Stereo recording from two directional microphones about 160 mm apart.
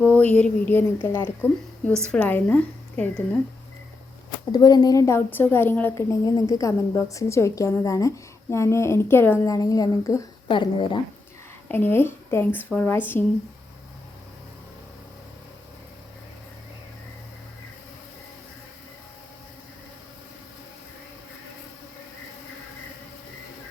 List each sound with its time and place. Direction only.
0.0 s a woman's voice: 10° left (ahead or behind)
4.5 s a woman's voice: 25° left (ahead or behind)
6.2 s a woman's voice: 20° left (ahead or behind)
10.5 s speech: 30° left (ahead or behind)
11.7 s a woman's voice: 15° left (ahead or behind)